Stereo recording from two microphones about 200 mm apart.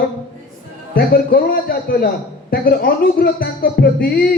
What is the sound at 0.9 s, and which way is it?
Music, 50° left (ahead or behind).